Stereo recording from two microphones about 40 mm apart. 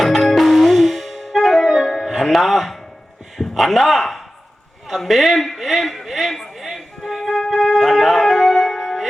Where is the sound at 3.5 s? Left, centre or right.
Centre.